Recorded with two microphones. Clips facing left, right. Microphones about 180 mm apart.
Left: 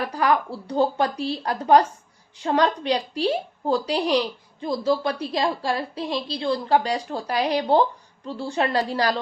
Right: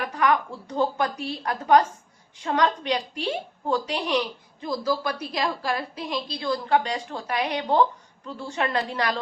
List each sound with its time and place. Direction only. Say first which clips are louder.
0.0 s a woman's voice: left 1 dB; 35° left (ahead or behind)